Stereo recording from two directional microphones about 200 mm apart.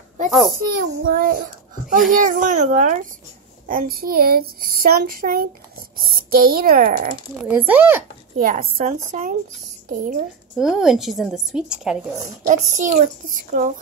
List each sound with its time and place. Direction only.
0.7 s a child's voice: 45° right (ahead or behind)
7.3 s speech: 5° right (ahead or behind)
8.4 s a child's voice: 45° right (ahead or behind)
10.6 s a woman's voice: centre (ahead or behind)
12.4 s a woman's voice: 35° right (ahead or behind)